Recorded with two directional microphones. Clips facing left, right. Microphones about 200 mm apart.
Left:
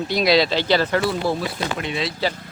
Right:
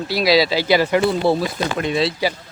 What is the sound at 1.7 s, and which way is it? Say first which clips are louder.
Speech: right 6 dB; 40° right (ahead or behind).